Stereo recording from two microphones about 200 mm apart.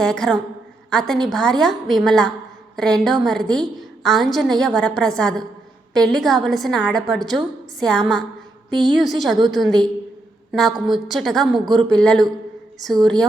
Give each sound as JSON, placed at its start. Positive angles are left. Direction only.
{"t": 0.0, "sound": "a woman's voice", "side_deg": 5}
{"t": 11.6, "sound": "speech", "side_deg": -20}
{"t": 11.9, "sound": "a woman's voice", "side_deg": 5}